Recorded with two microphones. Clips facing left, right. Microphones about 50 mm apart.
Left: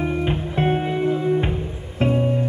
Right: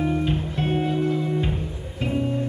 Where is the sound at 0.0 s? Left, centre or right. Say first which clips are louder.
Left 1 dB; left.